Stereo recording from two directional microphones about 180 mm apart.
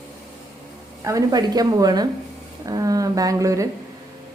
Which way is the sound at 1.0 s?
20° right (ahead or behind).